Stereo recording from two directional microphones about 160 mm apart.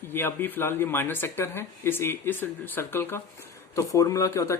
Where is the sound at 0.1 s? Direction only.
15° left (ahead or behind).